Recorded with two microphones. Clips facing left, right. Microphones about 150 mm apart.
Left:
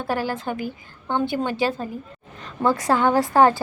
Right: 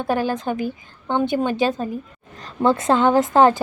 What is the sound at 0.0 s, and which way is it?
A woman's voice, 20° right (ahead or behind).